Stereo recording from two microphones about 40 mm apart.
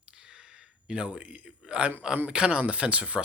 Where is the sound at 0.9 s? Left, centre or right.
Right.